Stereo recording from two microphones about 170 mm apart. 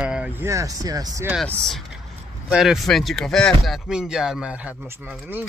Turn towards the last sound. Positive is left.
turn(degrees=-10)  # may be behind; listen again after turning